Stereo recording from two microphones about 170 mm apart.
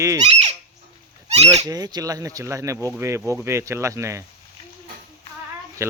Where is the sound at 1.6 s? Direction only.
25° right (ahead or behind).